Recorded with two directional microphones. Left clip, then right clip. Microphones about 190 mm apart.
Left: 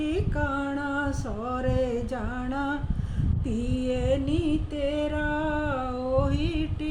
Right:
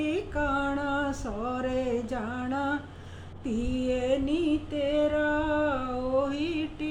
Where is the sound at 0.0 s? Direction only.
5° left (ahead or behind).